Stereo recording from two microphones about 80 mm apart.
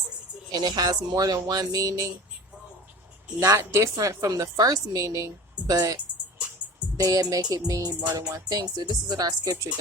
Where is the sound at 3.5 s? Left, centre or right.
Right.